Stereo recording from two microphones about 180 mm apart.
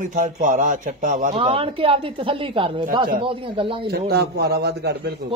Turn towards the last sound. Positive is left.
turn(degrees=-65)  # may be behind; listen again after turning